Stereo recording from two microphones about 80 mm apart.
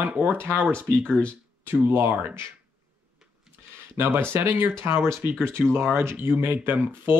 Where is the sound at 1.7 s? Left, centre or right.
Right.